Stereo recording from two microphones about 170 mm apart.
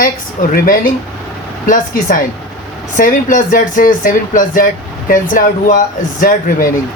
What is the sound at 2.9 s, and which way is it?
Speech, 55° left (ahead or behind).